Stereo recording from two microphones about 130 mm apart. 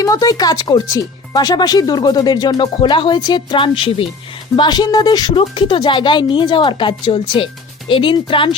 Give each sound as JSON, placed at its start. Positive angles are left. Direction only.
{"t": 0.0, "sound": "speech", "side_deg": 25}